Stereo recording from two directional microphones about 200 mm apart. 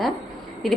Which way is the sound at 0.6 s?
Centre (ahead or behind).